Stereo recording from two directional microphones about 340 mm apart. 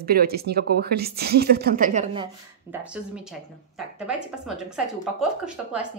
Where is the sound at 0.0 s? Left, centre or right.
Right.